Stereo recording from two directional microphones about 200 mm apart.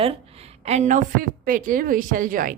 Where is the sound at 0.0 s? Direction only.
30° right (ahead or behind).